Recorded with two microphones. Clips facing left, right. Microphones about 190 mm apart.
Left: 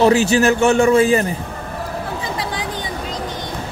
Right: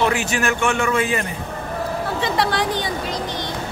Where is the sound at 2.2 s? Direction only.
75° right (ahead or behind).